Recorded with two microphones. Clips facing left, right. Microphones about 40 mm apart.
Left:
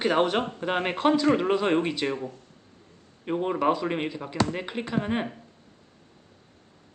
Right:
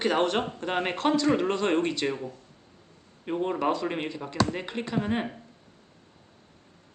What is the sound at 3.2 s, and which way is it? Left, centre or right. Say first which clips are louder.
Speech: left 2 dB; centre.